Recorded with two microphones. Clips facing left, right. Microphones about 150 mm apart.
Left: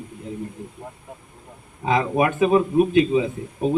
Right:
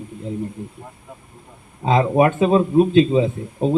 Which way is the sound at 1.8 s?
25° right (ahead or behind).